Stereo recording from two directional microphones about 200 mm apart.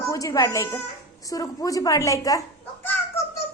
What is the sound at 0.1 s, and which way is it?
A woman's voice, 15° left (ahead or behind).